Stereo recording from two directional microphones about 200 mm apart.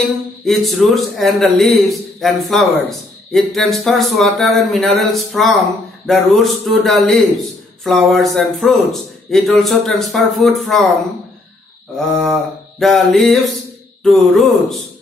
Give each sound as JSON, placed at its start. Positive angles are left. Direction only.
{"t": 0.5, "sound": "a man's voice", "side_deg": 0}
{"t": 12.0, "sound": "a man's voice", "side_deg": 0}